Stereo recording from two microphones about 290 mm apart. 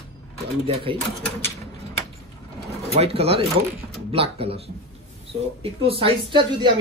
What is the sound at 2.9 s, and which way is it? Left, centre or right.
Speech, right.